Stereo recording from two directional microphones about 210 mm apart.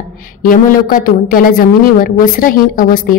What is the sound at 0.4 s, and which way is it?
A woman's voice, 40° left (ahead or behind).